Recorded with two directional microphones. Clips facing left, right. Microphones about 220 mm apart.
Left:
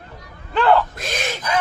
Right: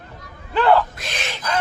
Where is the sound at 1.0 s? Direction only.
45° left (ahead or behind).